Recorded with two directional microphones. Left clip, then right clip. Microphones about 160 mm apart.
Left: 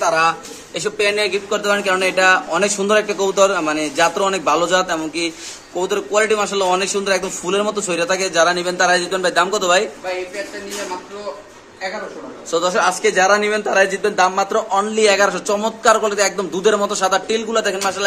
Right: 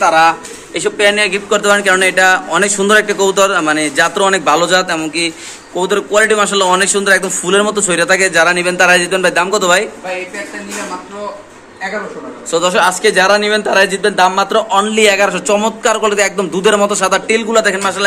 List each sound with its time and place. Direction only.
0.0 s a man's voice: 25° right (ahead or behind)
0.9 s speech: 15° right (ahead or behind)
12.4 s speech: centre (ahead or behind)